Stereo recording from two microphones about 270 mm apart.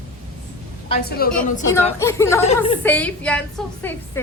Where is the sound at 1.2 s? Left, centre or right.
Left.